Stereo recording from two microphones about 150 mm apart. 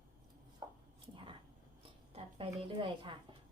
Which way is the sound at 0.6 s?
25° right (ahead or behind).